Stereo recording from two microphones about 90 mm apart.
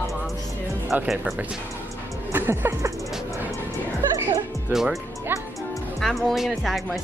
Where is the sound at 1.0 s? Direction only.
5° right (ahead or behind).